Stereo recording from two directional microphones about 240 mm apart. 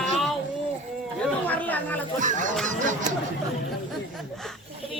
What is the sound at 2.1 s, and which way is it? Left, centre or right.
Speech, right.